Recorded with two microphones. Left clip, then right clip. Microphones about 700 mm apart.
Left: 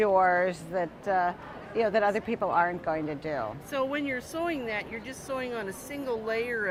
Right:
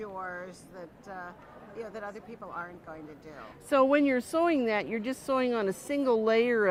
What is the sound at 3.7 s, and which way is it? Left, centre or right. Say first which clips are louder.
Speech: right 8 dB; right.